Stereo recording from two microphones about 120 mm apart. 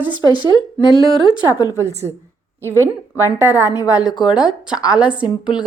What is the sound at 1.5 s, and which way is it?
Speech, 30° left (ahead or behind).